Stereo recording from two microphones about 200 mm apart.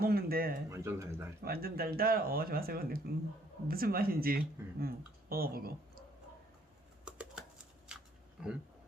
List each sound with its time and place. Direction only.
0.0 s speech: 50° right (ahead or behind)
0.7 s speech: 15° right (ahead or behind)
1.5 s speech: 50° right (ahead or behind)
7.0 s a sound: 5° right (ahead or behind)